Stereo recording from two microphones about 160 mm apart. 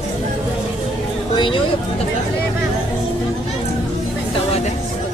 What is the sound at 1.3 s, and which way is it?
Speech, 30° left (ahead or behind).